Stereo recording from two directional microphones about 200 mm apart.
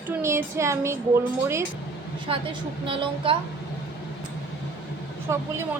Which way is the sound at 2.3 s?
25° right (ahead or behind).